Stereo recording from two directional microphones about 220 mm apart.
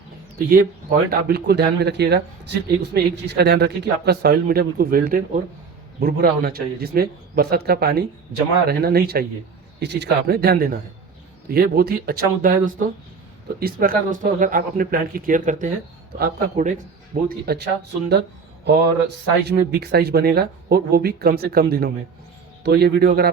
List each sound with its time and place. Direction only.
0.3 s speech: 40° right (ahead or behind)